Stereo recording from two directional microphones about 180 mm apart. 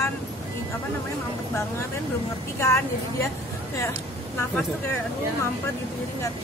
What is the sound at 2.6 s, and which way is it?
Speech, 15° left (ahead or behind).